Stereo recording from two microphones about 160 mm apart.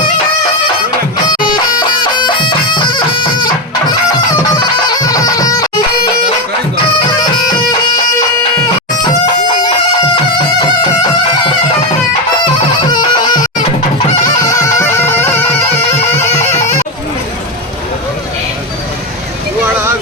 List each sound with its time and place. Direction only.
1.8 s music: 30° left (ahead or behind)
4.5 s bagpipes: 25° left (ahead or behind)
12.8 s music: 25° left (ahead or behind)
14.4 s music: 20° left (ahead or behind)